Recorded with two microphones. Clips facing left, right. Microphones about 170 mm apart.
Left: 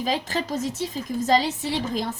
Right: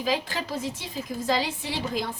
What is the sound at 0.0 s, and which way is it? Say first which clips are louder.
A woman's voice: left 2 dB; 45° left (ahead or behind).